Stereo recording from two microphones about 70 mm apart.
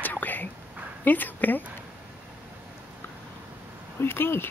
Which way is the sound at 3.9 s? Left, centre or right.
Left.